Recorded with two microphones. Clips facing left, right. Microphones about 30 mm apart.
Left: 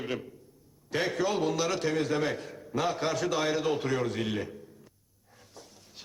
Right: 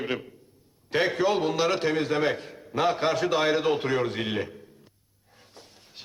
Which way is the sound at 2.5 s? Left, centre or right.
Right.